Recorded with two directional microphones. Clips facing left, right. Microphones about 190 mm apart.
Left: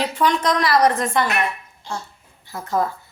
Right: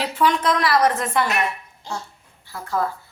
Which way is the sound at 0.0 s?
5° right (ahead or behind).